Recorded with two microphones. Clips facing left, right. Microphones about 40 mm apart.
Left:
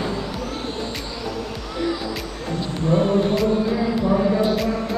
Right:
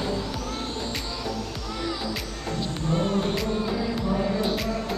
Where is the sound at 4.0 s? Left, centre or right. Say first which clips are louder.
Left 9 dB; centre.